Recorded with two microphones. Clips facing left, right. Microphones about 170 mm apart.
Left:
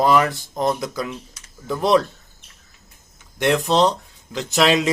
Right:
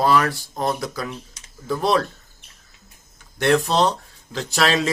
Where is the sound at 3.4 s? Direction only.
15° left (ahead or behind).